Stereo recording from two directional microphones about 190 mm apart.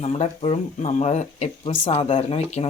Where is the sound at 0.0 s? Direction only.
35° left (ahead or behind).